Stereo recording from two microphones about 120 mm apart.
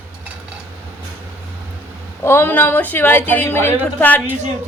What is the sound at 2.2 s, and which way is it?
A woman's voice, 20° left (ahead or behind).